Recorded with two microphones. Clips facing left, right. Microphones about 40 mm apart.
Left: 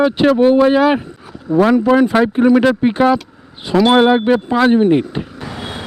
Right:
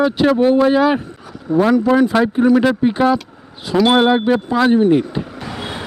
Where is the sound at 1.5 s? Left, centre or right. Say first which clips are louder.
Left 2 dB; right.